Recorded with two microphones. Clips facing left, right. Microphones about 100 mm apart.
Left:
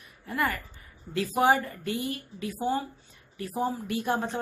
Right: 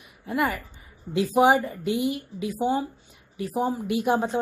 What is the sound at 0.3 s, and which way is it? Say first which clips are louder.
A woman's voice: right 4 dB; 15° right (ahead or behind).